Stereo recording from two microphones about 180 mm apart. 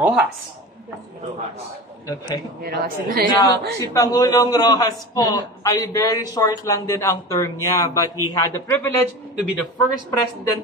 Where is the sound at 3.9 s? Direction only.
20° left (ahead or behind).